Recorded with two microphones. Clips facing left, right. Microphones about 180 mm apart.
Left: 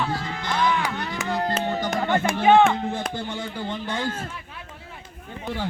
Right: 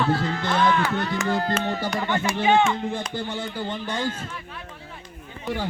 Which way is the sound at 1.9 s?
50° left (ahead or behind).